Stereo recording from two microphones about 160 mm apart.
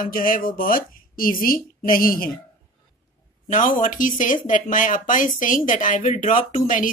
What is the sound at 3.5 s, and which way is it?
Speech, 55° left (ahead or behind).